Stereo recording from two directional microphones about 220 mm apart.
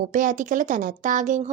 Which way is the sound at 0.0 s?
35° right (ahead or behind).